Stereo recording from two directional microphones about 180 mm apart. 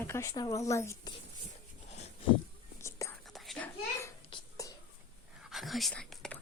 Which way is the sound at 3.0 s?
20° left (ahead or behind).